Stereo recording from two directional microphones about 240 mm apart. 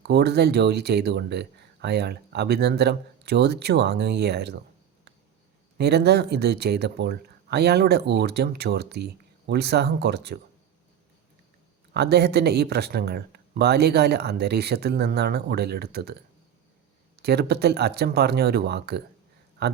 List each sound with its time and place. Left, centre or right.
0.0 s speech: right
5.7 s speech: right
11.9 s speech: right
17.2 s speech: right